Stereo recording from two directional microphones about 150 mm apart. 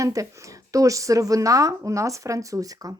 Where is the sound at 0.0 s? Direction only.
20° right (ahead or behind).